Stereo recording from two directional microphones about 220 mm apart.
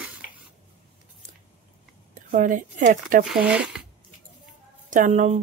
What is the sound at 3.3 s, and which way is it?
Speech, 5° right (ahead or behind).